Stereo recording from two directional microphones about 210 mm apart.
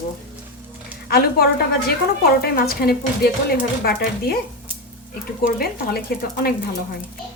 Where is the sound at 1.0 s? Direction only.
45° left (ahead or behind).